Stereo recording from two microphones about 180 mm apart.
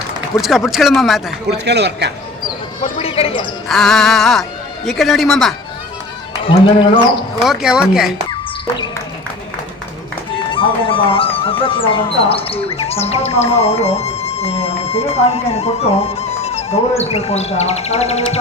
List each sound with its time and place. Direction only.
0.4 s speech: centre (ahead or behind)
1.5 s a man's voice: 70° right (ahead or behind)
3.0 s speech: 30° left (ahead or behind)
3.7 s speech: centre (ahead or behind)
6.5 s speech: 25° left (ahead or behind)
7.4 s speech: centre (ahead or behind)
10.5 s speech: 30° left (ahead or behind)